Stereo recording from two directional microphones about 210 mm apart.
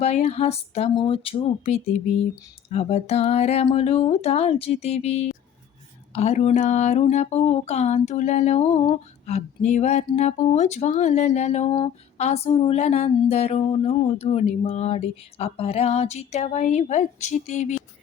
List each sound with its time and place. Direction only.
0.0 s speech: 30° left (ahead or behind)